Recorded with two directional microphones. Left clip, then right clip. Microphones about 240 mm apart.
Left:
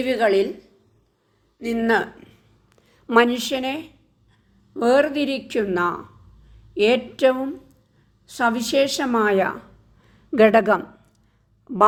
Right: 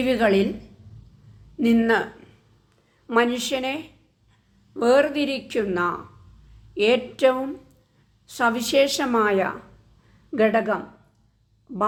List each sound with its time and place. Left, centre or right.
0.0 s a woman's voice: centre
1.6 s speech: centre; by 3.3 s left
3.3 s a woman's voice: centre
10.3 s speech: left